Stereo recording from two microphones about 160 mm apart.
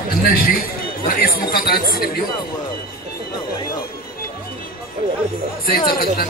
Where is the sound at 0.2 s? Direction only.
65° left (ahead or behind).